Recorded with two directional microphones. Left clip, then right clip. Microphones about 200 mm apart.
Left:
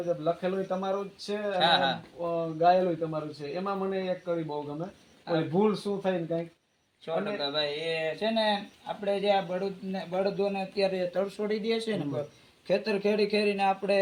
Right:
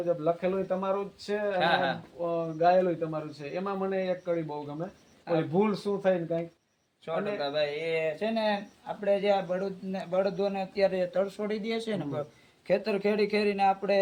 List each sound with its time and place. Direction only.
0.1 s a man's voice: 10° right (ahead or behind)
1.5 s speech: 30° right (ahead or behind)
2.2 s a man's voice: 5° left (ahead or behind)
7.0 s a man's voice: 5° right (ahead or behind)